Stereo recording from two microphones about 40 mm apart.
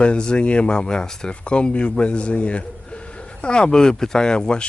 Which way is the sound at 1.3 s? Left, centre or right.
Left.